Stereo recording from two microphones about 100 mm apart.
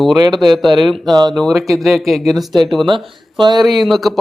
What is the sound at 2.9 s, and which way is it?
Speech, 50° right (ahead or behind).